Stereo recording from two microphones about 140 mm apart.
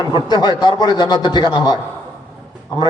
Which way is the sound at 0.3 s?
30° left (ahead or behind).